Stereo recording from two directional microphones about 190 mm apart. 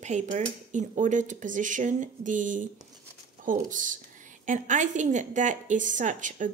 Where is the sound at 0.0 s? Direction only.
40° right (ahead or behind).